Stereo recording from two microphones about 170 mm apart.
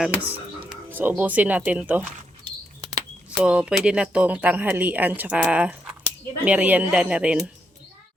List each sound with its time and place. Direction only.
0.0 s speech: 10° right (ahead or behind)
3.2 s speech: 5° right (ahead or behind)